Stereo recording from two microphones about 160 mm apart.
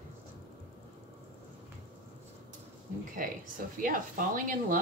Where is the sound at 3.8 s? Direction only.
60° right (ahead or behind).